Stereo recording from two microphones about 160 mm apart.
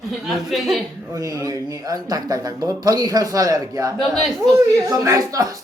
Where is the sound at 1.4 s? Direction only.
20° right (ahead or behind).